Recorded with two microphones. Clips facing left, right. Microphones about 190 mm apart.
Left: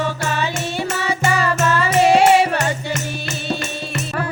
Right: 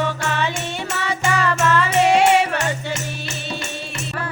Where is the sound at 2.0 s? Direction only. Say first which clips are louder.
Left 3 dB; 35° left (ahead or behind).